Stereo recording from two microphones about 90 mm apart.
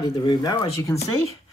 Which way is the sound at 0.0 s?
50° left (ahead or behind).